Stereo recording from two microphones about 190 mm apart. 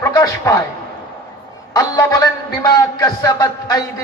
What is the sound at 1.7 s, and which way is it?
A man's voice, 20° left (ahead or behind).